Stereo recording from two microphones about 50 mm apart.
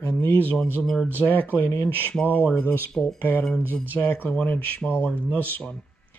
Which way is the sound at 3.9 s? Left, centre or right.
Left.